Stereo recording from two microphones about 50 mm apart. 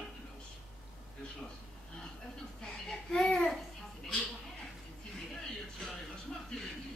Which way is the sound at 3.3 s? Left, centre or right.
Centre.